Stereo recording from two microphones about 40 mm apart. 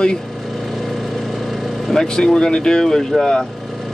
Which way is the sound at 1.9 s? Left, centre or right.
Centre.